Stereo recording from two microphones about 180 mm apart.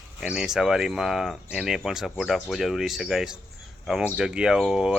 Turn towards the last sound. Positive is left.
turn(degrees=-5)  # may be behind; listen again after turning